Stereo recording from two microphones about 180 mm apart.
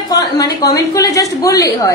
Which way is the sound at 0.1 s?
20° left (ahead or behind).